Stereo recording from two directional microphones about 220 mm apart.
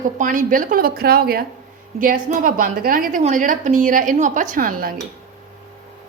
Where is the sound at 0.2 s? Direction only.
35° right (ahead or behind).